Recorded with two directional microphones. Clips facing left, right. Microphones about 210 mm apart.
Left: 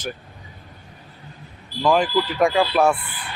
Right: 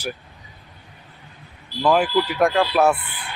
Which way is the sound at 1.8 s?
5° right (ahead or behind).